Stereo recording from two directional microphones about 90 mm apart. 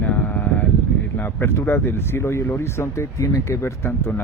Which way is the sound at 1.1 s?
25° left (ahead or behind).